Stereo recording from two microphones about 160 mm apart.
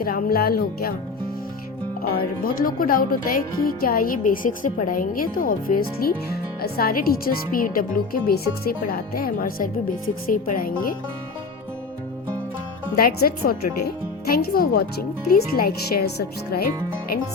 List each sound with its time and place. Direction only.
0.0 s speech: 65° left (ahead or behind)
2.4 s a woman's voice: 60° left (ahead or behind)
13.0 s speech: 70° left (ahead or behind)